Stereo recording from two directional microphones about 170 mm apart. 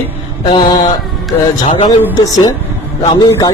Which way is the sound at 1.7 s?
30° left (ahead or behind).